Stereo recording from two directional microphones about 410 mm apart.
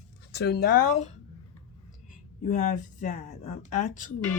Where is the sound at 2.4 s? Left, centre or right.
Centre.